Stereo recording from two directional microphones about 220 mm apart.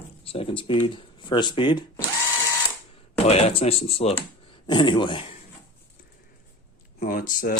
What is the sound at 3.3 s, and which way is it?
Speech, 30° left (ahead or behind).